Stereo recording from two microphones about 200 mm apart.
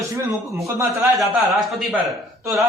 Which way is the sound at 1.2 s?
Centre (ahead or behind).